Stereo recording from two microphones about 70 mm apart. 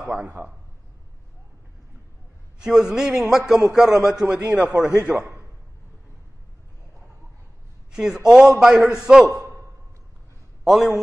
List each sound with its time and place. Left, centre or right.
0.1 s a man's voice: right
2.6 s a man's voice: centre
7.9 s a man's voice: centre
10.6 s a man's voice: centre